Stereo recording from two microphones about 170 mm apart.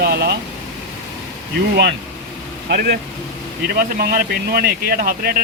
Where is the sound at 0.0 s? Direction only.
70° right (ahead or behind).